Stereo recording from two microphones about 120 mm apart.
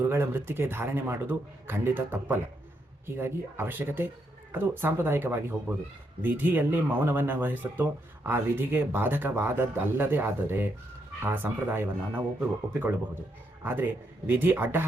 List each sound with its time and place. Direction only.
0.0 s speech: 20° right (ahead or behind)
13.6 s a man's voice: 15° right (ahead or behind)